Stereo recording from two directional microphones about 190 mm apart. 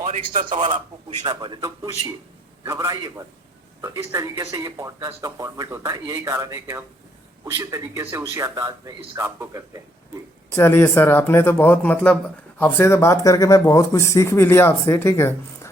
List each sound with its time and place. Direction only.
0.0 s a man's voice: 40° right (ahead or behind)
0.5 s a man's voice: 30° right (ahead or behind); by 9.8 s 15° right (ahead or behind)
10.5 s speech: 15° left (ahead or behind)